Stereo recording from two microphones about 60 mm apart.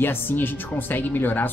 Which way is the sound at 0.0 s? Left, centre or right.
Left.